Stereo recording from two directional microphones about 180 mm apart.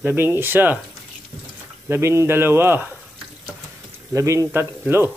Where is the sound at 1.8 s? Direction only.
15° right (ahead or behind).